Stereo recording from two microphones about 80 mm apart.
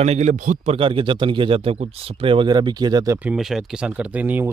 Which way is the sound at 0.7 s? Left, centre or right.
Right.